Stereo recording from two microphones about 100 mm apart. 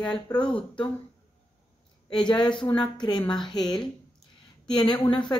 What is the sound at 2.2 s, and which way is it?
Speech, 50° left (ahead or behind).